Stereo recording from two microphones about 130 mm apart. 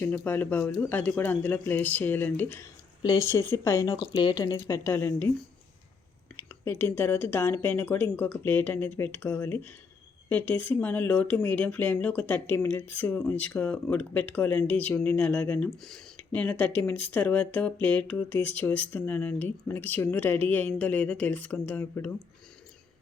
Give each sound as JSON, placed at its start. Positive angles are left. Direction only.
{"t": 0.0, "sound": "speech", "side_deg": 15}
{"t": 3.9, "sound": "speech", "side_deg": 35}
{"t": 4.5, "sound": "speech", "side_deg": 20}
{"t": 6.3, "sound": "speech", "side_deg": 20}